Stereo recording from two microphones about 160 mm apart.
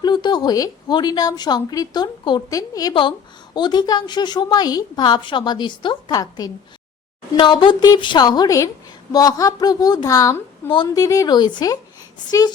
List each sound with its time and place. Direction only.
0.0 s speech: 25° left (ahead or behind)